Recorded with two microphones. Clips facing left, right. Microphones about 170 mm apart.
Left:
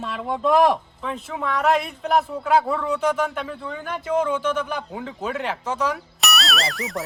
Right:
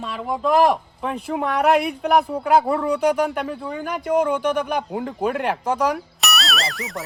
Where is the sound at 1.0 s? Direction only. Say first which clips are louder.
Right 4 dB; 60° right (ahead or behind).